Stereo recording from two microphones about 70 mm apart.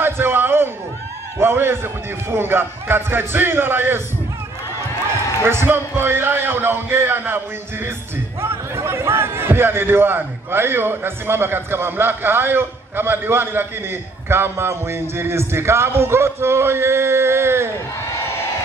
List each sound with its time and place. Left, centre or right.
0.0 s a sound: right
1.4 s a man's voice: right
5.4 s a man's voice: right